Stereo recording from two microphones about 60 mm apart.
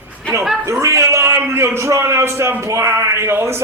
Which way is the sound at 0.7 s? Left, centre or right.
Right.